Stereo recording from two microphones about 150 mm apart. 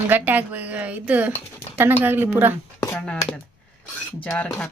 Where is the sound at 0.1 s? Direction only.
10° right (ahead or behind).